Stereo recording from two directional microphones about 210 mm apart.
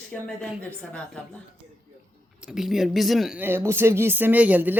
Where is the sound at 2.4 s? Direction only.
Centre (ahead or behind).